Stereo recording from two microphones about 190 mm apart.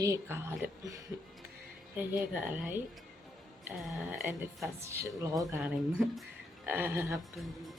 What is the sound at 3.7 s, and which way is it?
A woman's voice, 5° right (ahead or behind).